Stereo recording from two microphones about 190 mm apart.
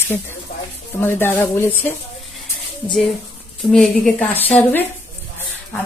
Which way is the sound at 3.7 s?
5° left (ahead or behind).